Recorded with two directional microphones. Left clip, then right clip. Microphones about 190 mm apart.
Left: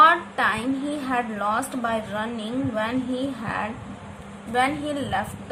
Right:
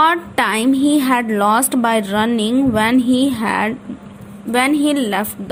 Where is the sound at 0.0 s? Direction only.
50° right (ahead or behind).